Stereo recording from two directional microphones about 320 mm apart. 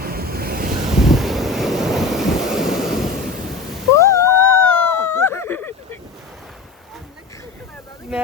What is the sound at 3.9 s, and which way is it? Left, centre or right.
Cat, centre.